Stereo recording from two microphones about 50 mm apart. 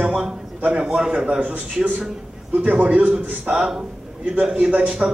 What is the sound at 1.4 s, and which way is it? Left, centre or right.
A man's voice, right.